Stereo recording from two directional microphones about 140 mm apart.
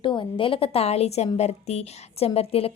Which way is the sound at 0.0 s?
35° left (ahead or behind).